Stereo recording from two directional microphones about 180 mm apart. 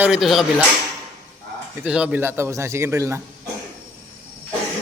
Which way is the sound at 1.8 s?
5° right (ahead or behind).